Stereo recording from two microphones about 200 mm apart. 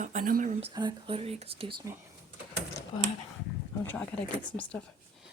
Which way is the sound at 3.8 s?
5° left (ahead or behind).